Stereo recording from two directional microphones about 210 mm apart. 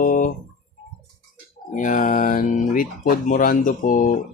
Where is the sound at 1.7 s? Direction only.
35° left (ahead or behind).